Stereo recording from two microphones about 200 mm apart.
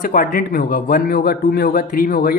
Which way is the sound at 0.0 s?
45° left (ahead or behind).